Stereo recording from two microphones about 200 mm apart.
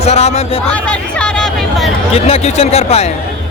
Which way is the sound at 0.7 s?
5° left (ahead or behind).